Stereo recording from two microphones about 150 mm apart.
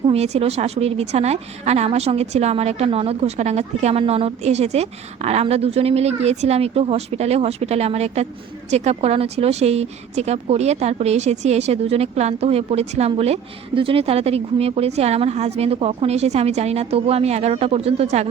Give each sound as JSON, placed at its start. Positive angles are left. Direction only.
{"t": 0.1, "sound": "speech", "side_deg": -45}